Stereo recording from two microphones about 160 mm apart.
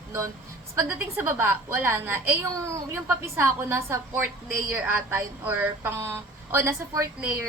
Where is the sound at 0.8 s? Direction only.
15° right (ahead or behind).